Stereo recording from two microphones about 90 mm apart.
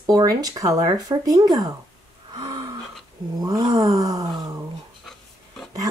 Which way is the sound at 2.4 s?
40° right (ahead or behind).